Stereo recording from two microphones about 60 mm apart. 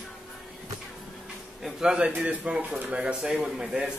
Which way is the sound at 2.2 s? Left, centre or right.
Centre.